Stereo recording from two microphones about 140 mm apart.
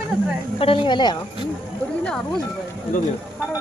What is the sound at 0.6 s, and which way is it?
Speech, 40° left (ahead or behind).